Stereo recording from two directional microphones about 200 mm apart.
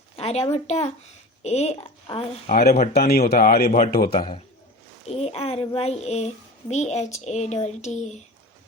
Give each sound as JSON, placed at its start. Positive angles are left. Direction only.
{"t": 0.2, "sound": "a sound", "side_deg": 30}
{"t": 0.5, "sound": "a child's voice", "side_deg": 35}
{"t": 2.5, "sound": "speech", "side_deg": 50}
{"t": 4.0, "sound": "a man's voice", "side_deg": 25}